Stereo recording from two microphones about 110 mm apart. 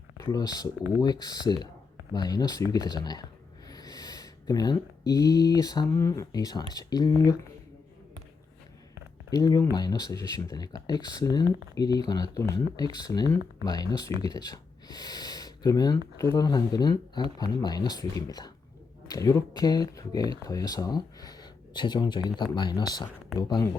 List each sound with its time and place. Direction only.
0.2 s speech: 35° left (ahead or behind)
9.3 s speech: 30° left (ahead or behind)